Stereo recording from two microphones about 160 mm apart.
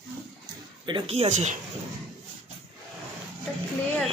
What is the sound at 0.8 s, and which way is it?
Speech, 35° right (ahead or behind).